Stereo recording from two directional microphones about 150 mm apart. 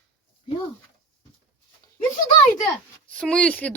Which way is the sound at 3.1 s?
5° left (ahead or behind).